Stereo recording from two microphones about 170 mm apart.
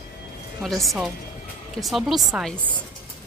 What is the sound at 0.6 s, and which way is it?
Speech, centre (ahead or behind).